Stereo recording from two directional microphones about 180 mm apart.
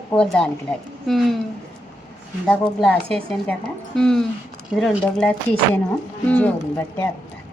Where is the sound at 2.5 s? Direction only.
5° left (ahead or behind).